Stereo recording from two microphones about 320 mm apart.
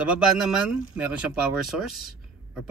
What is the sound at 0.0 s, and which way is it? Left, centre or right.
Speech, centre.